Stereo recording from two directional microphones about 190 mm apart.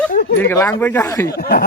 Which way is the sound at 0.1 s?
55° left (ahead or behind).